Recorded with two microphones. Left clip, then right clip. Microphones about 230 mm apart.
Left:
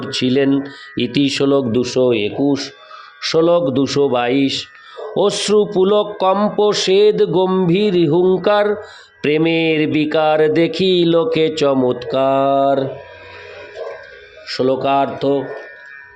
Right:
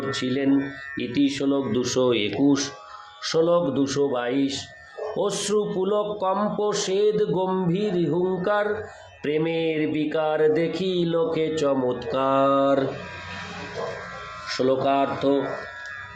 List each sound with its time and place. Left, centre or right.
0.0 s speech: left; by 2.6 s centre
3.2 s mantra: left
14.4 s mantra: left